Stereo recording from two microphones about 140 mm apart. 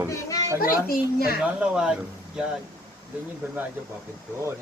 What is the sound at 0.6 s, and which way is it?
Speech, 90° left.